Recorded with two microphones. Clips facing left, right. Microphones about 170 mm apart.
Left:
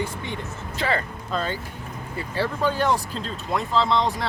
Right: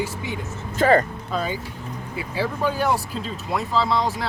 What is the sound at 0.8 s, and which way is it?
Speech, 45° right (ahead or behind).